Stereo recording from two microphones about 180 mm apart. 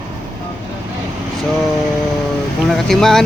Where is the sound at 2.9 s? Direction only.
Centre (ahead or behind).